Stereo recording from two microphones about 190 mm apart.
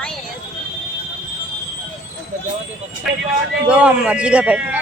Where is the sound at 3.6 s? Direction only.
5° right (ahead or behind).